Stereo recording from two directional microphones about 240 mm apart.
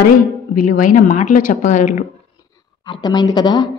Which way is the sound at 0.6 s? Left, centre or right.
Left.